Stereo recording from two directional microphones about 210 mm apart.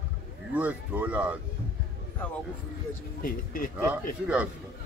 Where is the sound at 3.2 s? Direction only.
40° left (ahead or behind).